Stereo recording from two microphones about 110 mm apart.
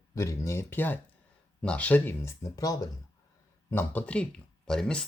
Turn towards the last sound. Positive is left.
turn(degrees=5)  # may be behind; listen again after turning